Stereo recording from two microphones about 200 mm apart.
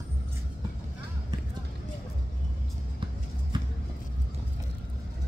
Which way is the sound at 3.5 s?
20° right (ahead or behind).